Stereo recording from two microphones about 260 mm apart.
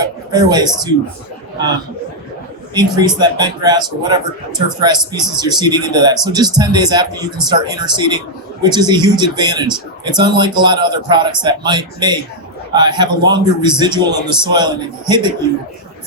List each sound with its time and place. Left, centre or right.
0.0 s speech: centre
2.7 s speech: centre